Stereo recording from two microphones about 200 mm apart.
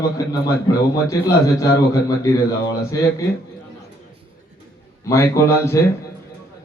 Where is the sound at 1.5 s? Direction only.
15° left (ahead or behind).